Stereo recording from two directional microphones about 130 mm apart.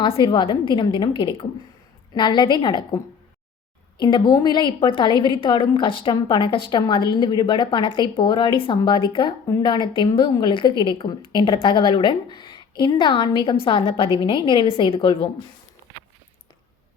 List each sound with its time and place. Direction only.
0.0 s a woman's voice: 40° left (ahead or behind)
4.0 s a woman's voice: 30° left (ahead or behind)